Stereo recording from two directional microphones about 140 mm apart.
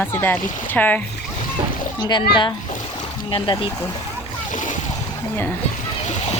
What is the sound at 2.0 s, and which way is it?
Speech, 35° left (ahead or behind).